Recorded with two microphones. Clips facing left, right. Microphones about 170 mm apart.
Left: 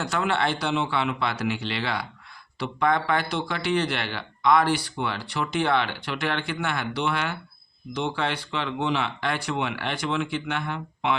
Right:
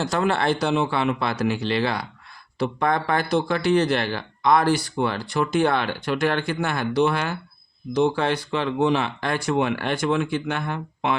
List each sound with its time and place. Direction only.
0.0 s speech: 40° right (ahead or behind)